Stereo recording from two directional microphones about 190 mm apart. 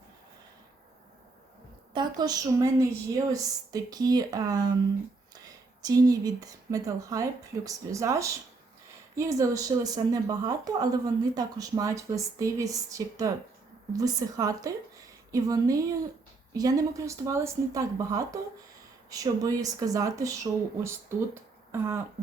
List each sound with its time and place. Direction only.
1.9 s a woman's voice: 20° right (ahead or behind)
5.8 s a woman's voice: 20° right (ahead or behind)